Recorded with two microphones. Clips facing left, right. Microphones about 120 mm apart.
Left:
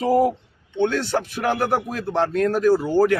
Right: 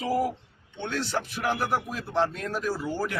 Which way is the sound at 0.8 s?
60° left (ahead or behind).